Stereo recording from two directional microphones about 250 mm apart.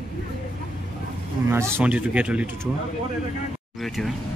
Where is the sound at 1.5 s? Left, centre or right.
Centre.